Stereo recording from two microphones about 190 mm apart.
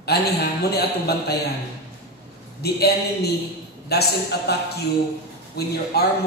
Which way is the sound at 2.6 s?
60° left (ahead or behind).